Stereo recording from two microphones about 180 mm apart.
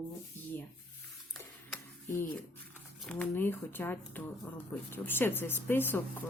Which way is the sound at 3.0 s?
10° left (ahead or behind).